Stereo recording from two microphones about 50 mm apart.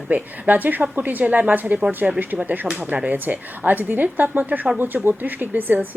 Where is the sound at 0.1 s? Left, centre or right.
Right.